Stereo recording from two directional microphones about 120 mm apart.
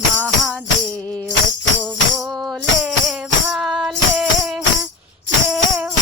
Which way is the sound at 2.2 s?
Centre (ahead or behind).